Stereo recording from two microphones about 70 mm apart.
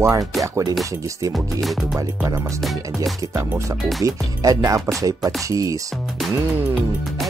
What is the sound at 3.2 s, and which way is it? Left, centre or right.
Music, right.